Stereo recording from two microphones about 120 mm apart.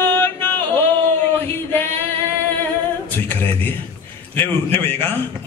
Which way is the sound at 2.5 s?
15° left (ahead or behind).